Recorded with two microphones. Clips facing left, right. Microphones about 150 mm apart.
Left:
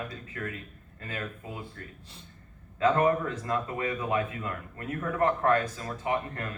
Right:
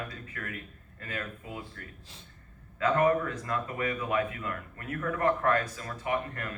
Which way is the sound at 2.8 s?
25° left (ahead or behind).